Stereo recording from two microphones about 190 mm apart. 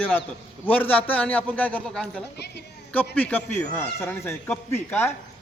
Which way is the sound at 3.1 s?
10° left (ahead or behind).